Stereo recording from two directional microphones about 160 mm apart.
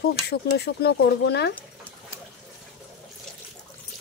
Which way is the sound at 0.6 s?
90° left.